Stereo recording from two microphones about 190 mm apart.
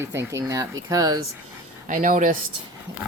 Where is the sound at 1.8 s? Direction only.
40° right (ahead or behind).